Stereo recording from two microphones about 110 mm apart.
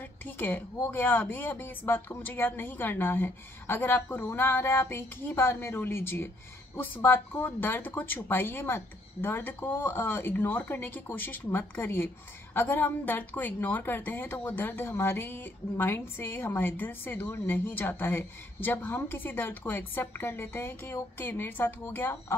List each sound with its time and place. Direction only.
0.7 s a woman's voice: 20° left (ahead or behind)